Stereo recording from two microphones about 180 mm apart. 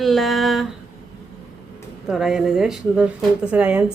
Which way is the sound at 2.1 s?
Centre (ahead or behind).